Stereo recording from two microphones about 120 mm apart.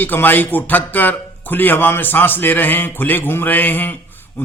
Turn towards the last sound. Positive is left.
turn(degrees=15)  # may be behind; listen again after turning